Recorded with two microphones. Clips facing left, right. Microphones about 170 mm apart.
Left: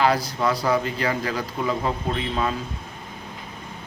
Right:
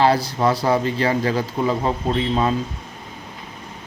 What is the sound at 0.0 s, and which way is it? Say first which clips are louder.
A man's voice: right 4 dB; 30° right (ahead or behind).